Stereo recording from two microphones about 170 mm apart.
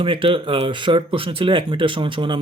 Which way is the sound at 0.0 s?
30° right (ahead or behind).